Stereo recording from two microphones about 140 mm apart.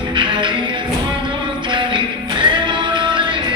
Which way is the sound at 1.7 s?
35° right (ahead or behind).